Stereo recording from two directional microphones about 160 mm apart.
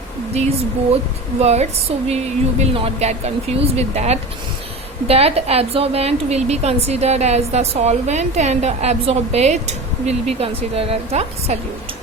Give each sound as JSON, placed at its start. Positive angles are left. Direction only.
{"t": 1.4, "sound": "a woman's voice", "side_deg": -40}